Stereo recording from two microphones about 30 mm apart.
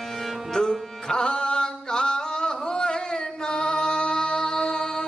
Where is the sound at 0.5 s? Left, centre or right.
Centre.